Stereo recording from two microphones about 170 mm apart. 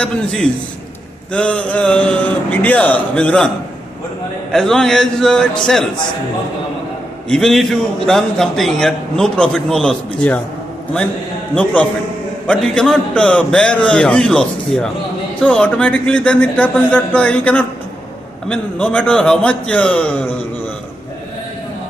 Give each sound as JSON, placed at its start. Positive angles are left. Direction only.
{"t": 0.0, "sound": "a man's voice", "side_deg": 5}
{"t": 4.5, "sound": "a man's voice", "side_deg": 5}
{"t": 7.2, "sound": "a man's voice", "side_deg": 5}
{"t": 11.5, "sound": "a man's voice", "side_deg": 5}